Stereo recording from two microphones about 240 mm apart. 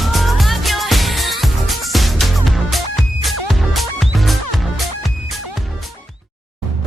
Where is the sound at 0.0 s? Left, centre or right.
Centre.